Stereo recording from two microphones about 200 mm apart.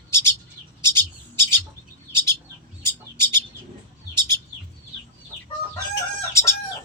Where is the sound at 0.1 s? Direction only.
10° left (ahead or behind).